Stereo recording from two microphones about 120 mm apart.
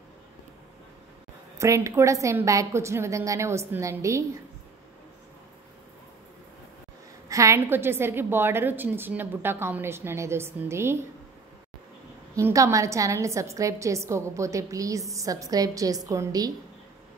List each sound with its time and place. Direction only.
1.6 s a woman's voice: 25° right (ahead or behind)
7.2 s a woman's voice: 25° right (ahead or behind)
12.4 s a woman's voice: 25° right (ahead or behind)